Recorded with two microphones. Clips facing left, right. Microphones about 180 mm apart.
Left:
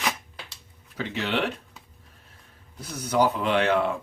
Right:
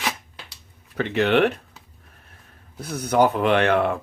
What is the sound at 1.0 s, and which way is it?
Speech, 60° right (ahead or behind).